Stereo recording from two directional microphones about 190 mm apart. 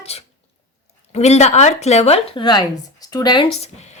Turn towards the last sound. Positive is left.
turn(degrees=35)  # may be behind; listen again after turning